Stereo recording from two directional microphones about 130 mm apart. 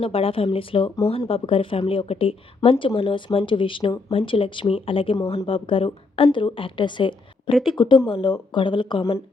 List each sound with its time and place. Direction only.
0.0 s a woman's voice: 45° left (ahead or behind)